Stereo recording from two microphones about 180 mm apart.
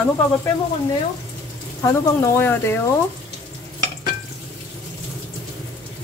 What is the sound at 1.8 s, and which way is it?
Speech, 15° left (ahead or behind).